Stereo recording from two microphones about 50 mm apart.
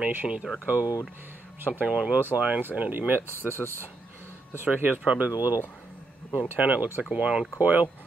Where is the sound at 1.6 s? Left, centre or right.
Right.